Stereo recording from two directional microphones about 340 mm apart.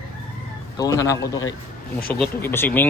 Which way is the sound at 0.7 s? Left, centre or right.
Centre.